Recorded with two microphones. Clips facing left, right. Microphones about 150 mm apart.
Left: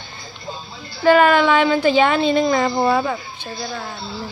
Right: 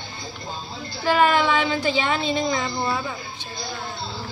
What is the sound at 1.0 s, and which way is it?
Speech, 55° left (ahead or behind).